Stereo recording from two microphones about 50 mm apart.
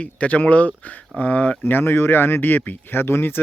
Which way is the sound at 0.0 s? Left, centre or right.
Left.